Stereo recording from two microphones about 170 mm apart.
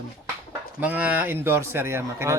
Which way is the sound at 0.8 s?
10° right (ahead or behind).